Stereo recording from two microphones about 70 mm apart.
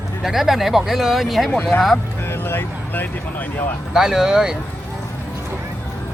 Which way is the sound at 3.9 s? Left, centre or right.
Centre.